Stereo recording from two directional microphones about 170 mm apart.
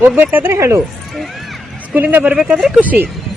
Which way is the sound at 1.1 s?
Centre (ahead or behind).